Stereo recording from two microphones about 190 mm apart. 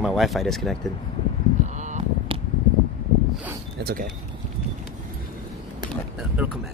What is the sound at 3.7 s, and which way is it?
Speech, 55° right (ahead or behind).